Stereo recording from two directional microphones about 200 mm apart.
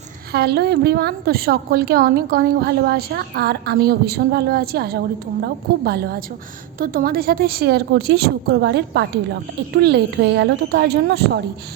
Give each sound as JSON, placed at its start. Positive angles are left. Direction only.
{"t": 0.3, "sound": "a woman's voice", "side_deg": -55}